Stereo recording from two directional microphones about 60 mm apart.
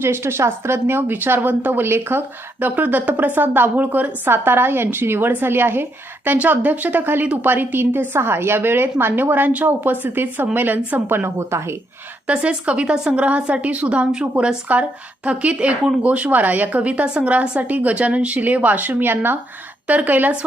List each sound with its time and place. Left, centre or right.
0.0 s a woman's voice: right
12.3 s a woman's voice: centre